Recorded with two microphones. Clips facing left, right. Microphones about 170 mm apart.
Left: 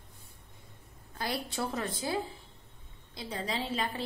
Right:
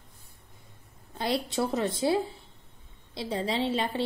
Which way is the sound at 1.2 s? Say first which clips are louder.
Right 6 dB; 20° right (ahead or behind).